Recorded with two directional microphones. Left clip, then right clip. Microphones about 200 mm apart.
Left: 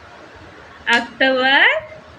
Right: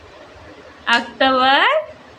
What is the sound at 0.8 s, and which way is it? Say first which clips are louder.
Speech: even; 25° right (ahead or behind).